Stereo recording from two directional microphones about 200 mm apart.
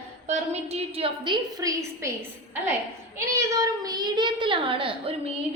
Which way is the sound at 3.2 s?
15° right (ahead or behind).